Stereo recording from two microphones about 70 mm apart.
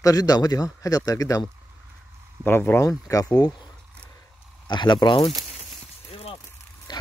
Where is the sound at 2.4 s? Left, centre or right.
Left.